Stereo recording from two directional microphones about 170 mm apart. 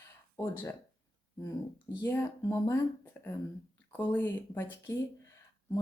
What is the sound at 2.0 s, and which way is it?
Speech, 15° left (ahead or behind).